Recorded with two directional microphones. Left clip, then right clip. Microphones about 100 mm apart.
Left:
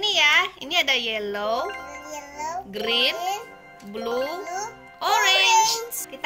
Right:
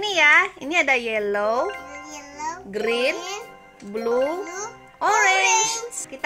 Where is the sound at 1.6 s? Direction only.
Centre (ahead or behind).